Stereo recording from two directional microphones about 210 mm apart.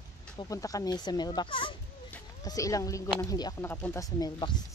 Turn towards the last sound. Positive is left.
turn(degrees=15)  # may be behind; listen again after turning